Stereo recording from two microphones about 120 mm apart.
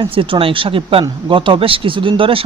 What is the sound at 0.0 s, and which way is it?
Speech, 45° right (ahead or behind).